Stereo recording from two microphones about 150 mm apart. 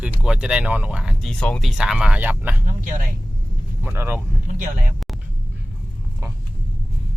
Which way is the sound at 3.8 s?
15° right (ahead or behind).